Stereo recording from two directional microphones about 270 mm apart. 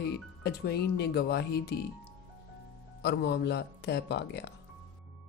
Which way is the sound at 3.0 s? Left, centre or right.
Left.